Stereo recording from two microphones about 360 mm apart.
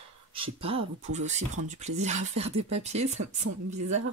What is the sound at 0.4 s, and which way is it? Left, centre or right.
Speech, centre.